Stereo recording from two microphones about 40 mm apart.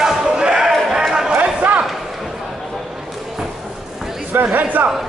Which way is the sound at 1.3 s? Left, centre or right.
Right.